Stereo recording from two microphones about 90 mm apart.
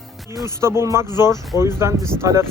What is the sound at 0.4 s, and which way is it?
Speech, 30° right (ahead or behind).